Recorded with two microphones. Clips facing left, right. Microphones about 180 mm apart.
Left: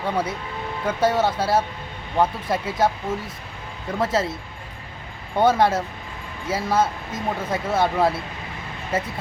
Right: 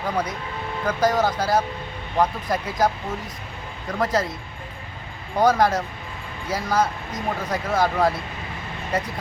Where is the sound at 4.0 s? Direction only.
25° left (ahead or behind).